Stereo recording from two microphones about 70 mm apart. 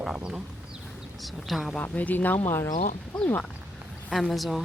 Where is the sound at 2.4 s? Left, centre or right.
Left.